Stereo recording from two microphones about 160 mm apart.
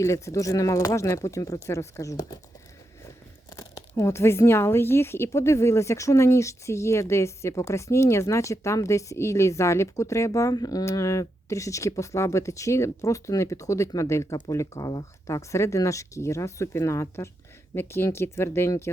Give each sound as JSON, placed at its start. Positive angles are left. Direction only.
{"t": 0.0, "sound": "speech", "side_deg": 20}
{"t": 3.5, "sound": "speech", "side_deg": 20}